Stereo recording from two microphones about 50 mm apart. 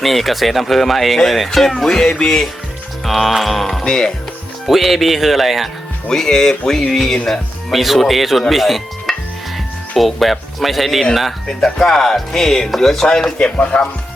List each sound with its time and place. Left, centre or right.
0.0 s speech: centre
3.8 s speech: centre
4.6 s speech: centre
6.1 s speech: centre